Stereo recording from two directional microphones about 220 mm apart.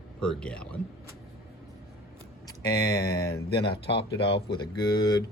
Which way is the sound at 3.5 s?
25° left (ahead or behind).